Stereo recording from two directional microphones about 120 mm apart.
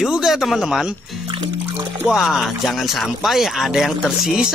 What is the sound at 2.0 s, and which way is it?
Speech, 5° right (ahead or behind).